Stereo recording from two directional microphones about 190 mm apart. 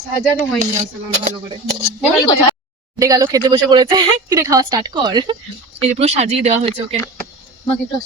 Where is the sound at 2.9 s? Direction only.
20° right (ahead or behind).